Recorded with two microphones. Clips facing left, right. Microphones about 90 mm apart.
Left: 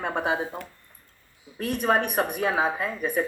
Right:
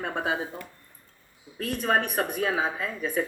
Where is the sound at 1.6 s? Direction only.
60° left (ahead or behind).